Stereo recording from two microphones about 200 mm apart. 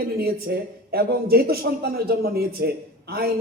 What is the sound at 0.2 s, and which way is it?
A man's voice, 50° right (ahead or behind).